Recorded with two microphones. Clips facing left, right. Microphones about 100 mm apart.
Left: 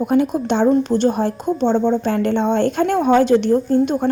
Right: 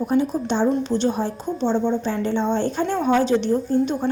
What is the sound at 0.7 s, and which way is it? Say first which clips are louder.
A woman's voice: left 5 dB; 50° left (ahead or behind).